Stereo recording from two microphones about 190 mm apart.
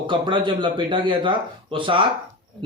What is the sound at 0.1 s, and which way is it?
Speech, 25° right (ahead or behind).